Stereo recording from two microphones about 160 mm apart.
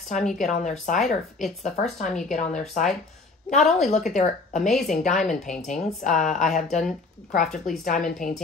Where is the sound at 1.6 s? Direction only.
45° left (ahead or behind).